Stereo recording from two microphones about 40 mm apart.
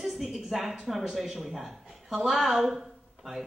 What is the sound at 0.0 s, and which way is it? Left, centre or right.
Speech, centre.